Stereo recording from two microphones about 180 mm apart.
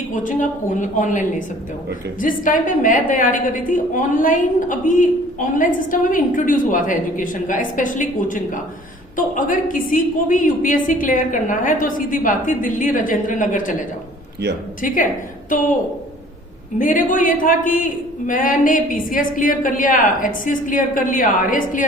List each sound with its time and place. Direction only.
0.1 s a woman's voice: 45° left (ahead or behind)
14.8 s a woman's voice: 50° left (ahead or behind)
16.7 s a woman's voice: 45° left (ahead or behind)